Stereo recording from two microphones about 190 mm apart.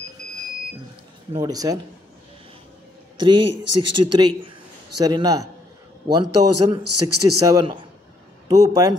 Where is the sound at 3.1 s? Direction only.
25° right (ahead or behind).